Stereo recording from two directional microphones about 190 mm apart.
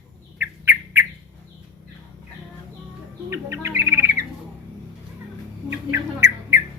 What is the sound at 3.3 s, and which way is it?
Bird, 15° right (ahead or behind).